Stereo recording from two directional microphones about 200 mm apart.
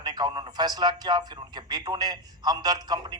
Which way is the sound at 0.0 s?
20° right (ahead or behind).